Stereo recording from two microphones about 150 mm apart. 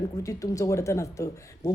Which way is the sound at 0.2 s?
20° left (ahead or behind).